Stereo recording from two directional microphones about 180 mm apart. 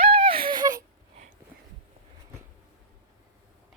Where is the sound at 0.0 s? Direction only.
30° right (ahead or behind).